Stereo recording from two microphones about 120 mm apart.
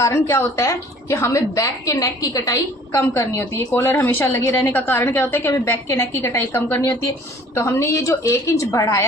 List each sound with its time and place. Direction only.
0.0 s a woman's voice: 25° left (ahead or behind)